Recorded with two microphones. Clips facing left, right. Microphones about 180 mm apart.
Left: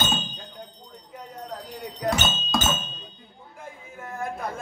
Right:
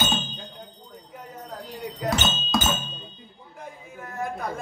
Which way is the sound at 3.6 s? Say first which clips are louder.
Right 1 dB; centre (ahead or behind).